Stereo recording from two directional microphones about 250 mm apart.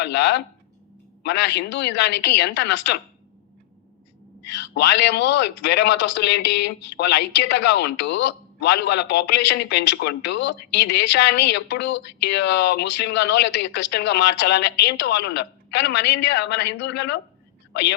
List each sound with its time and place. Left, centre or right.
0.0 s a man's voice: left
4.4 s a man's voice: left